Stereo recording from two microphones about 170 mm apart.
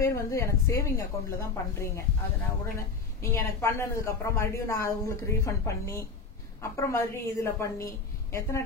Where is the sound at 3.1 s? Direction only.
15° left (ahead or behind).